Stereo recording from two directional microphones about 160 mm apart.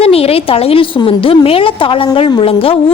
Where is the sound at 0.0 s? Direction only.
40° left (ahead or behind).